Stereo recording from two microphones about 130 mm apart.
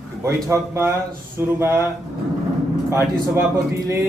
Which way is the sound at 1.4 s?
15° right (ahead or behind).